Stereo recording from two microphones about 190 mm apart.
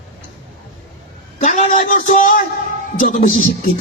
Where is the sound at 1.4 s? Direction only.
35° left (ahead or behind).